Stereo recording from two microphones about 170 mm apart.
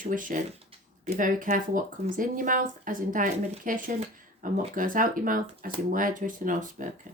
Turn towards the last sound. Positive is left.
turn(degrees=-50)  # may be behind; listen again after turning